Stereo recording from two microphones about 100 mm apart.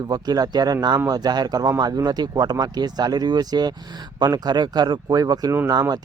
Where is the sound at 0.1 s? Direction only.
40° right (ahead or behind).